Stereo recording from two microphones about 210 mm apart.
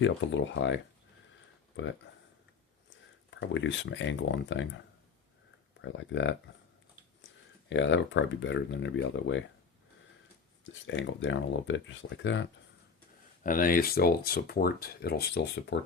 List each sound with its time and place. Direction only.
0.0 s speech: 60° left (ahead or behind)
3.2 s speech: 60° left (ahead or behind)
5.8 s speech: 60° left (ahead or behind)
7.7 s speech: 60° left (ahead or behind)
10.6 s speech: 60° left (ahead or behind)
13.4 s speech: 40° left (ahead or behind)